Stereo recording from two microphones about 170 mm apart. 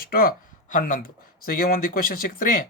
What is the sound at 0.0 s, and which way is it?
Speech, 60° left (ahead or behind).